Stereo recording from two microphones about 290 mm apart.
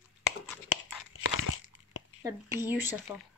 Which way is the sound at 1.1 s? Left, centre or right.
Left.